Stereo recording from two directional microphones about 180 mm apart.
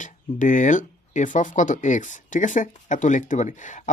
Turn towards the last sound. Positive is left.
turn(degrees=45)  # may be behind; listen again after turning